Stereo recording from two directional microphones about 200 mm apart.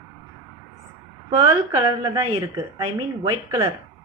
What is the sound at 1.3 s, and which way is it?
A woman's voice, 25° right (ahead or behind).